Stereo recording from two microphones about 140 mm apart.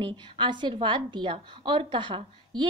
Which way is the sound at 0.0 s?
35° right (ahead or behind).